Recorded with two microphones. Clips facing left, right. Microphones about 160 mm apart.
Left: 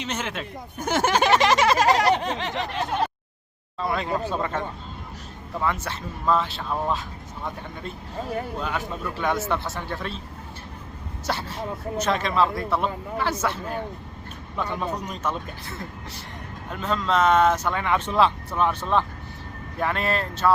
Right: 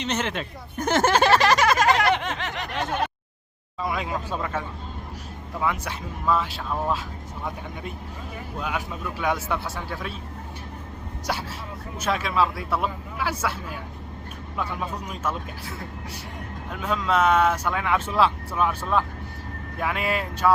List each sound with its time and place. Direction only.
0.0 s speech: 5° left (ahead or behind); by 3.1 s 30° left (ahead or behind)
3.8 s speech: 10° right (ahead or behind)
8.5 s speech: 10° right (ahead or behind)
11.3 s speech: 10° right (ahead or behind)
16.7 s speech: 10° right (ahead or behind)